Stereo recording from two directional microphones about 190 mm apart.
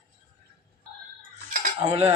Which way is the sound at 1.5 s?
45° right (ahead or behind).